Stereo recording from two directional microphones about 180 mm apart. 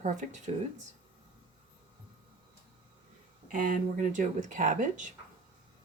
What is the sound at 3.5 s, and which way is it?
Speech, 50° right (ahead or behind).